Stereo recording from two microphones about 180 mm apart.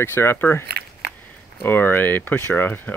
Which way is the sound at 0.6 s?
65° right (ahead or behind).